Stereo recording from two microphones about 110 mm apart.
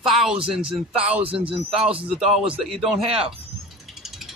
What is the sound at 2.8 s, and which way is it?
Speech, 60° right (ahead or behind).